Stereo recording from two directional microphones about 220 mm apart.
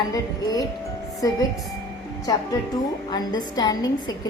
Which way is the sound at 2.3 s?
15° left (ahead or behind).